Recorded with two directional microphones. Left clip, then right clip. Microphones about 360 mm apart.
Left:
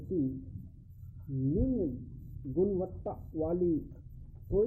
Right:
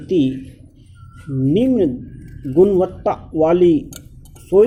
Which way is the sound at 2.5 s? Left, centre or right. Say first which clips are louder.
Right 18 dB; right.